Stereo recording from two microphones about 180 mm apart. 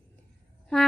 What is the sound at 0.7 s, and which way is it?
Speech, 5° left (ahead or behind).